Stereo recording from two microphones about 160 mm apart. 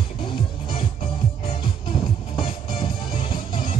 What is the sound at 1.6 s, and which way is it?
Music, 30° left (ahead or behind).